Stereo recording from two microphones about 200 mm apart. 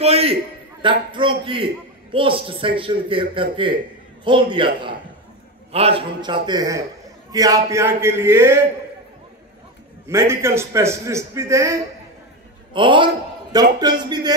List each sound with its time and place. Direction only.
0.0 s a man's voice: 30° right (ahead or behind); by 8.5 s 15° right (ahead or behind)
10.0 s a man's voice: 15° right (ahead or behind)
12.7 s a man's voice: 25° right (ahead or behind)